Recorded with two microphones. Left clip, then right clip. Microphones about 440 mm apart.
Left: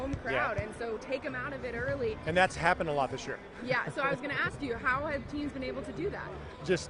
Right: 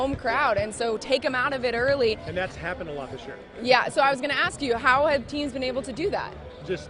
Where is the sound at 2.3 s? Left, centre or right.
Left.